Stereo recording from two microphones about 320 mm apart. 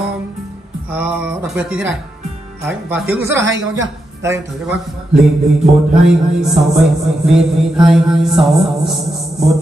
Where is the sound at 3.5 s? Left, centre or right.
Right.